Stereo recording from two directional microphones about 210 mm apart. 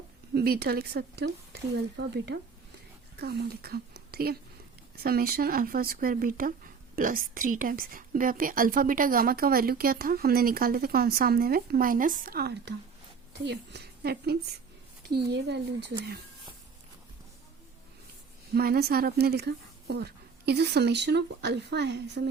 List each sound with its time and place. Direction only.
0.3 s a woman's voice: 50° right (ahead or behind)
18.5 s a woman's voice: 45° right (ahead or behind)